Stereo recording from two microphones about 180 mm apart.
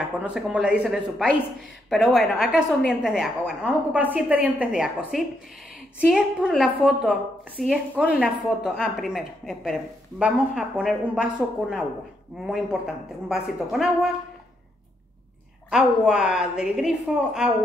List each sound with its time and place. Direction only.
0.2 s a woman's voice: 5° right (ahead or behind)
15.7 s a woman's voice: 5° right (ahead or behind)